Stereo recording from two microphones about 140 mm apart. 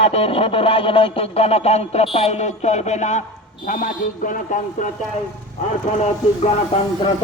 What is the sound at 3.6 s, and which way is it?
Speech, 70° left (ahead or behind).